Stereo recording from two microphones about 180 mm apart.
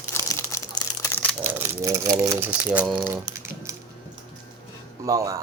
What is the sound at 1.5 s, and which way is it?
Speech, 15° right (ahead or behind).